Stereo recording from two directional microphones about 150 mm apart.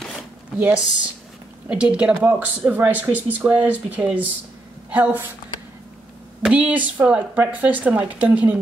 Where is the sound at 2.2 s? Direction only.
10° right (ahead or behind).